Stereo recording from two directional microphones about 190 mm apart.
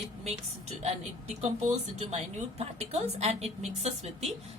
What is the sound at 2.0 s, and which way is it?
A woman's voice, 35° right (ahead or behind).